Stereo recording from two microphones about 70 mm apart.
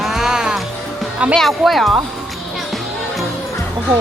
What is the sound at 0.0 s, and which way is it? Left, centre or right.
Music, centre.